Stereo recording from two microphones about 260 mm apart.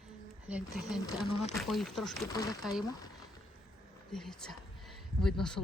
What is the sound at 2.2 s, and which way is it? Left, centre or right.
Speech, centre.